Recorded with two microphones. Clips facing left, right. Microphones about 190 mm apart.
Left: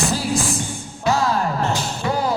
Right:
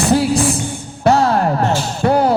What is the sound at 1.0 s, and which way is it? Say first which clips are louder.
Music: right 6 dB; 60° right (ahead or behind).